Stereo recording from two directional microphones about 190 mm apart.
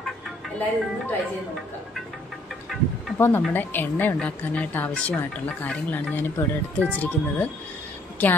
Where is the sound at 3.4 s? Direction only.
10° left (ahead or behind).